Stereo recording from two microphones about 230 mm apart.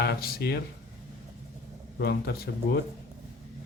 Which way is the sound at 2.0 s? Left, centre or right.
Left.